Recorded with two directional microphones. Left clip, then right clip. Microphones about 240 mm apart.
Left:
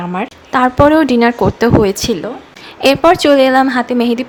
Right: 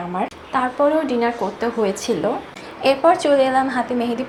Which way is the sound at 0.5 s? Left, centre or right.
Left.